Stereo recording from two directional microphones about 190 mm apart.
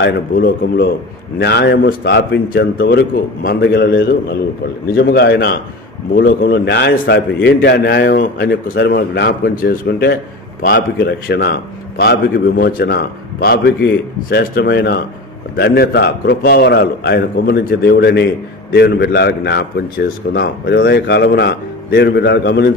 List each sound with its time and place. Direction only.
0.0 s a man's voice: 60° left (ahead or behind)